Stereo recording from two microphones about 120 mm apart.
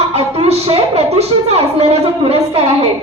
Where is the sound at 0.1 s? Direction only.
55° right (ahead or behind).